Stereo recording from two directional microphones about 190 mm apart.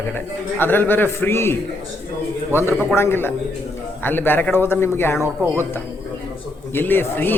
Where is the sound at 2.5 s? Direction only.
15° left (ahead or behind).